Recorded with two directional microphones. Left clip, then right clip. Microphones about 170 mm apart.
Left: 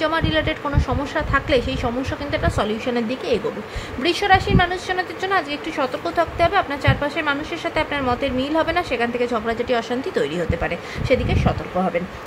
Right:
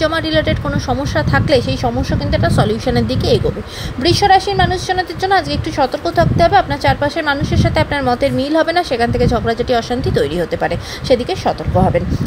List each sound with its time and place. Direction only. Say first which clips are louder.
0.0 s a woman's voice: right 5 dB; 15° right (ahead or behind)